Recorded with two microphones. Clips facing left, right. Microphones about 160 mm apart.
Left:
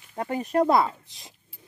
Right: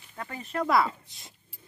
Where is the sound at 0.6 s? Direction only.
20° left (ahead or behind).